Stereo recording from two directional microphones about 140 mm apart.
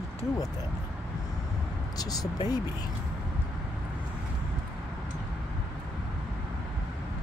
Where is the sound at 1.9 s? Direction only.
25° left (ahead or behind).